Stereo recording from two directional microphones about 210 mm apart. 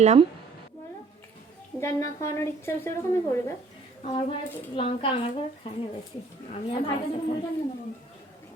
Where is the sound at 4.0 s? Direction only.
25° left (ahead or behind).